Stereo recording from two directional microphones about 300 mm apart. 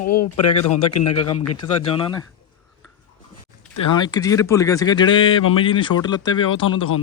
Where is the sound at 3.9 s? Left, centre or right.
Centre.